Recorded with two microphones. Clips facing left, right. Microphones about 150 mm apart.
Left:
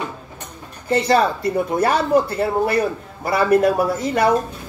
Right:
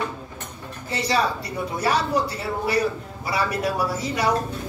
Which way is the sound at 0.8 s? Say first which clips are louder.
Left 7 dB; 50° left (ahead or behind).